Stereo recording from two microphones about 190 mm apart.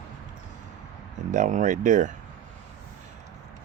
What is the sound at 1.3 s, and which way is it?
Speech, 40° right (ahead or behind).